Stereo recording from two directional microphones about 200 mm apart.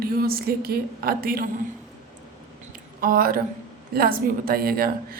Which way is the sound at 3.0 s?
45° right (ahead or behind).